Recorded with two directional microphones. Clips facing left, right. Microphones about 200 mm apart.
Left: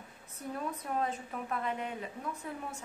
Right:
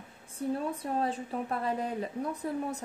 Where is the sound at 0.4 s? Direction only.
30° right (ahead or behind).